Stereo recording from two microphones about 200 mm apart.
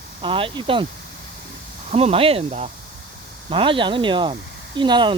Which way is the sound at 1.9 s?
30° right (ahead or behind).